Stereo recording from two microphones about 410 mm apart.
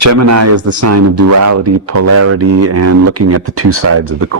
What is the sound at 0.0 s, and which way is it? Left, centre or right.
Speech, right.